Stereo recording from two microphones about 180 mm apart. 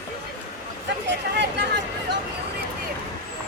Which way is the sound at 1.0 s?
75° right (ahead or behind).